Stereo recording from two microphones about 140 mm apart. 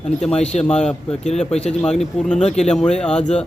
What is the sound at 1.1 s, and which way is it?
Speech, 50° left (ahead or behind).